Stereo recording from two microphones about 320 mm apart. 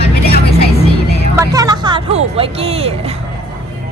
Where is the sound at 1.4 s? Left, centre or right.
Centre.